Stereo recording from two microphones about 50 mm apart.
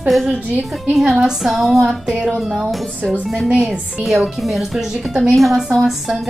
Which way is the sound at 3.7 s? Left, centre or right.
Centre.